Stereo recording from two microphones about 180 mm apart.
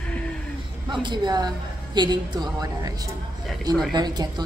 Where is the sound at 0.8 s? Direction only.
25° right (ahead or behind).